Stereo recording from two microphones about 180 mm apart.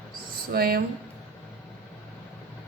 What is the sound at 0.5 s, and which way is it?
Speech, 55° right (ahead or behind).